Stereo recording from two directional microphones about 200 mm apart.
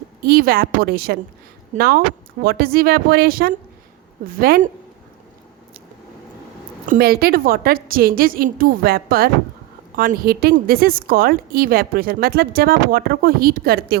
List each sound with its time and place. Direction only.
0.2 s a woman's voice: 50° right (ahead or behind)
6.8 s a woman's voice: 45° right (ahead or behind)